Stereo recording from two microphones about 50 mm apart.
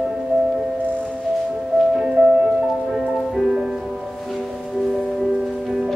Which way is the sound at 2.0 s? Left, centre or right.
Centre.